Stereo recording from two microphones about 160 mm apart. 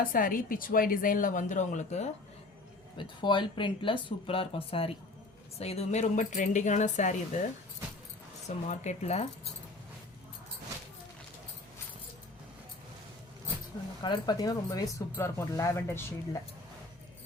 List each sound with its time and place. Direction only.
0.1 s speech: 60° left (ahead or behind)
3.2 s speech: 30° left (ahead or behind); by 7.4 s 50° left (ahead or behind)
8.4 s speech: 45° left (ahead or behind)
14.0 s speech: 25° left (ahead or behind)